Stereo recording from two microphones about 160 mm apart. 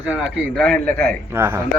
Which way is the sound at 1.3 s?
15° right (ahead or behind).